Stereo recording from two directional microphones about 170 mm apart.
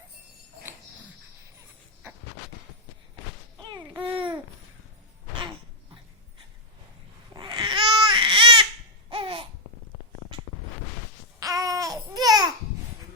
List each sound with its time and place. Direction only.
3.6 s a sound: 25° right (ahead or behind)
4.1 s babbling: 30° right (ahead or behind)
7.3 s babbling: 25° right (ahead or behind)
9.0 s laughter: 30° right (ahead or behind)
11.3 s babbling: 20° right (ahead or behind)